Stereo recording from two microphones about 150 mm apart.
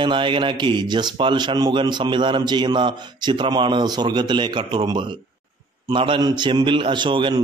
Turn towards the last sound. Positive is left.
turn(degrees=-35)  # may be behind; listen again after turning